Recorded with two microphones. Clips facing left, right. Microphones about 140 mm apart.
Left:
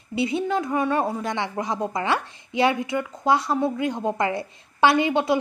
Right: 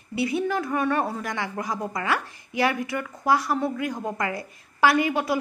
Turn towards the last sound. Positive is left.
turn(degrees=25)  # may be behind; listen again after turning